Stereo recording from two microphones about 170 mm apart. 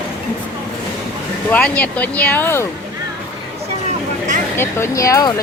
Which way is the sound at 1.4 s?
10° left (ahead or behind).